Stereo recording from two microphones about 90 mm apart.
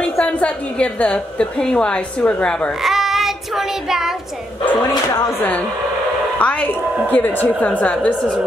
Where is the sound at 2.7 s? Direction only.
5° right (ahead or behind).